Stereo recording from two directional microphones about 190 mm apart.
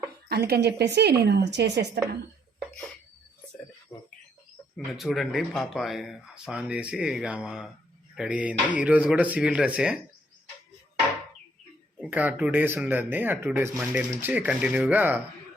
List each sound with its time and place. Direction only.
0.3 s a woman's voice: 55° right (ahead or behind)
4.9 s speech: centre (ahead or behind)
11.9 s speech: 10° right (ahead or behind)